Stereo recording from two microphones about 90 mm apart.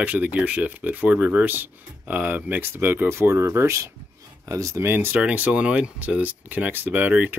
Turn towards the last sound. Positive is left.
turn(degrees=-20)  # may be behind; listen again after turning